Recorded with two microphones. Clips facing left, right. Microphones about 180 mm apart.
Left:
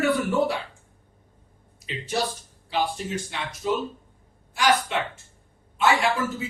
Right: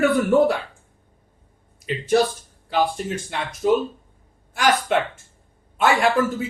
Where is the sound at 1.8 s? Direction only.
55° right (ahead or behind).